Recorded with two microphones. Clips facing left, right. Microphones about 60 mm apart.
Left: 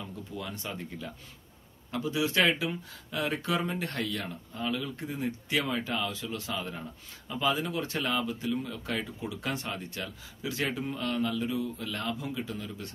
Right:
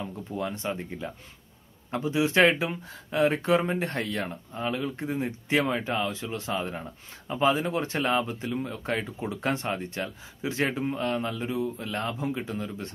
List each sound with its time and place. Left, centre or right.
0.0 s speech: right